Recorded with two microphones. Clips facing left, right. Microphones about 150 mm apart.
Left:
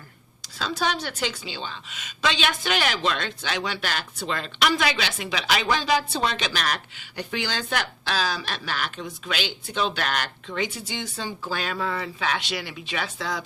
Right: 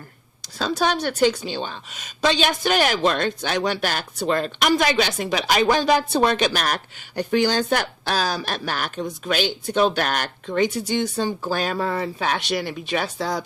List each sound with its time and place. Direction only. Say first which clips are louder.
1.0 s a woman's voice: right 10 dB; 45° right (ahead or behind)